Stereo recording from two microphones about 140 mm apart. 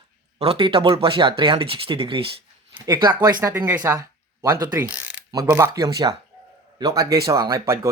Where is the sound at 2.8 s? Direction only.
30° right (ahead or behind).